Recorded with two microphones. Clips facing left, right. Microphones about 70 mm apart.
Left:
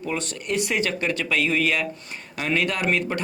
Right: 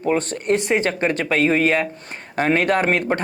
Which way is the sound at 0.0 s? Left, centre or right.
Right.